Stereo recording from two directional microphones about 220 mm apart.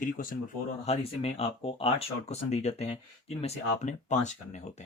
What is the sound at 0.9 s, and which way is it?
Speech, 25° left (ahead or behind).